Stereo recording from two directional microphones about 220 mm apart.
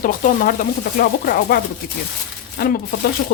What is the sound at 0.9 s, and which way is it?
Speech, 40° left (ahead or behind).